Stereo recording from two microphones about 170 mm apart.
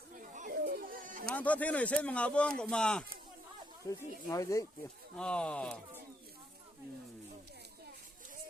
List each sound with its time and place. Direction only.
0.1 s a sound: 50° right (ahead or behind)
1.4 s speech: 10° left (ahead or behind)
3.8 s speech: 20° left (ahead or behind)
5.1 s speech: 5° left (ahead or behind)